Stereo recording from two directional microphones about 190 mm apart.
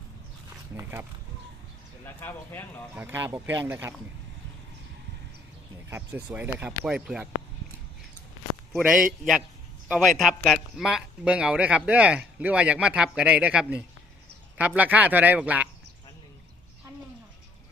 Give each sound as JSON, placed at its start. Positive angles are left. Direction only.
{"t": 0.7, "sound": "a sound", "side_deg": -10}
{"t": 2.0, "sound": "speech", "side_deg": 10}
{"t": 2.9, "sound": "speech", "side_deg": -10}
{"t": 6.3, "sound": "speech", "side_deg": -10}
{"t": 8.7, "sound": "speech", "side_deg": 0}